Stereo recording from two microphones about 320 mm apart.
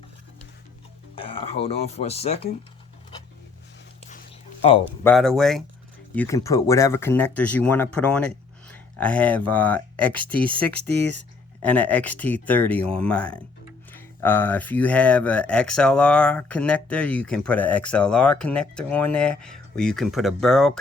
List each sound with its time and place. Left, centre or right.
1.1 s speech: centre
4.1 s a sound: left
5.0 s speech: centre
8.7 s a sound: centre
9.5 s speech: centre
11.6 s speech: centre